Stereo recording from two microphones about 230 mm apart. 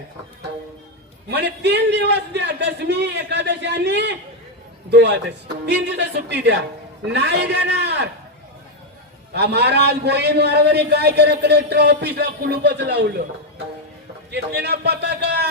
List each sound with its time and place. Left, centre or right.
1.3 s a man's voice: right
9.3 s a man's voice: right
14.3 s a man's voice: right